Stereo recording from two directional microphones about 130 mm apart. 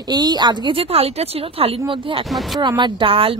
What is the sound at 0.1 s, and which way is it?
A woman's voice, 35° right (ahead or behind).